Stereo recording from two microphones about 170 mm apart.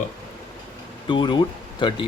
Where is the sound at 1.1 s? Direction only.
30° left (ahead or behind).